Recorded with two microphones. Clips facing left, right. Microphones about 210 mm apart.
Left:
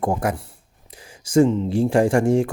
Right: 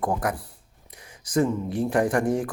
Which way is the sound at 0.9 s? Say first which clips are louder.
Left 6 dB; 30° left (ahead or behind).